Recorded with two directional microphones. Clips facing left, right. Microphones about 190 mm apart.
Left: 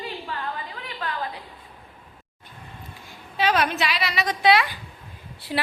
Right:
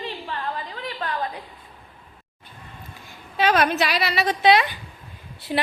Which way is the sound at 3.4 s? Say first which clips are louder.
Right 3 dB; 50° right (ahead or behind).